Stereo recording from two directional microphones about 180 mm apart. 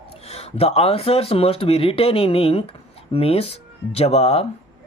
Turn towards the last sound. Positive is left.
turn(degrees=35)  # may be behind; listen again after turning